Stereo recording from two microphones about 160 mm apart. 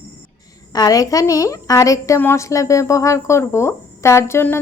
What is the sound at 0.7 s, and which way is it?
A woman's voice, 25° left (ahead or behind).